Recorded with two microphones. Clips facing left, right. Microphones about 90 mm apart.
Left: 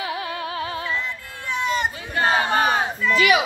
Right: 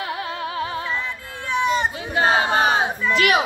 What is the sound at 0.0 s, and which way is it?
Music, 55° right (ahead or behind).